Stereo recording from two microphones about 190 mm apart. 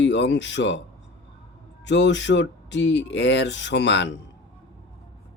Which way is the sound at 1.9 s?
70° left (ahead or behind).